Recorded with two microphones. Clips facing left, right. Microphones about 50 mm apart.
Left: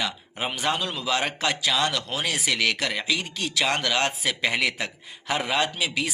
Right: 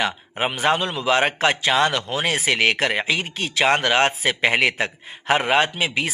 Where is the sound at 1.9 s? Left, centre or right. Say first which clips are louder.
Right 5 dB; right.